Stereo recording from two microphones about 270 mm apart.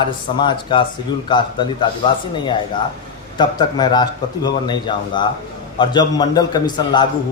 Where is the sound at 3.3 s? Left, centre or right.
Centre.